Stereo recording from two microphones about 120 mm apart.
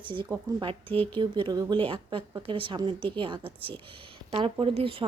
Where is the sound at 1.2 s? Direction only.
40° right (ahead or behind).